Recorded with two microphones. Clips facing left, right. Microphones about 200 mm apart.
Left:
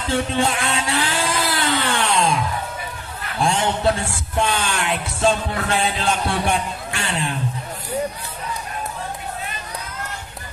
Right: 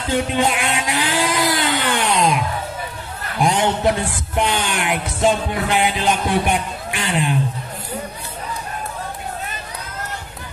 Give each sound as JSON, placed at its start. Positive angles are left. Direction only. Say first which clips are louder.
{"t": 0.1, "sound": "vehicle", "louder": "right 2 dB", "side_deg": -15}
{"t": 3.3, "sound": "speech", "louder": "right 3 dB", "side_deg": -15}